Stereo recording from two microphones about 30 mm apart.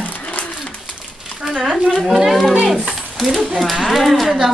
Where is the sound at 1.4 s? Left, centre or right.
Centre.